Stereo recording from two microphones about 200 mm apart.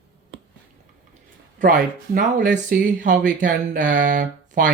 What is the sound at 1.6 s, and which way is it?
Speech, 40° right (ahead or behind).